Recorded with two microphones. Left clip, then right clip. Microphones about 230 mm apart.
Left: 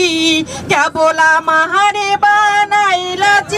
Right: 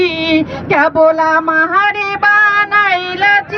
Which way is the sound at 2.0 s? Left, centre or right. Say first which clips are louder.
Left 3 dB; left.